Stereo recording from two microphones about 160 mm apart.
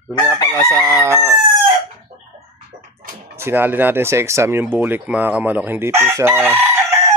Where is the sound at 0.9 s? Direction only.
15° right (ahead or behind).